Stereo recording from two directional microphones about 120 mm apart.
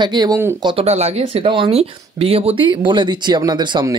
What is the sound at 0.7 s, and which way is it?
Speech, 60° right (ahead or behind).